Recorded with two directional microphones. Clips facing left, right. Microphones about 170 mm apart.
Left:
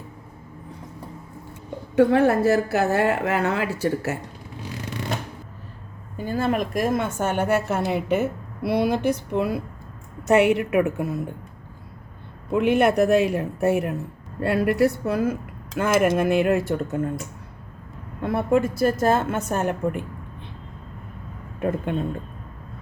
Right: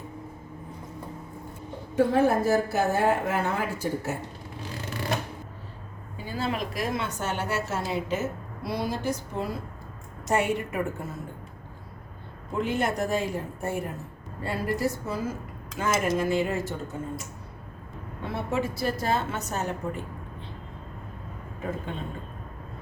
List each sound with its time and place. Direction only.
2.0 s a woman's voice: 70° left (ahead or behind)
6.1 s a woman's voice: 50° left (ahead or behind); by 11.2 s 65° left (ahead or behind)
12.5 s a woman's voice: 65° left (ahead or behind)
18.2 s a woman's voice: 55° left (ahead or behind)